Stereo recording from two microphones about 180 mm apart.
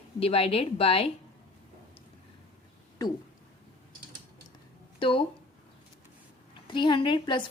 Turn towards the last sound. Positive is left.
turn(degrees=25)  # may be behind; listen again after turning